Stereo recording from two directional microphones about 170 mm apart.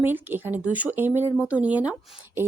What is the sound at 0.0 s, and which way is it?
Speech, 10° right (ahead or behind).